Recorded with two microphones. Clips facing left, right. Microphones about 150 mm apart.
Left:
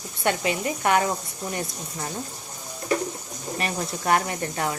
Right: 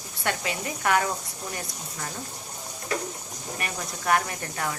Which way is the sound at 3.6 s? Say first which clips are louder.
Left 6 dB; 25° left (ahead or behind).